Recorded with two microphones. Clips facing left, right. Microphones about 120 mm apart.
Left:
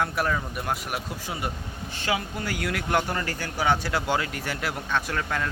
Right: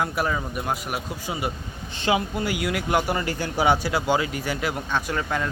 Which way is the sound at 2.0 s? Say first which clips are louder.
Right 5 dB; 20° right (ahead or behind).